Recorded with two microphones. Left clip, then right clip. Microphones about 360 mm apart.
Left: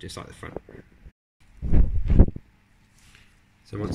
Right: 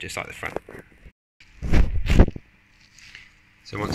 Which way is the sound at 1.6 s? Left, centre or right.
Right.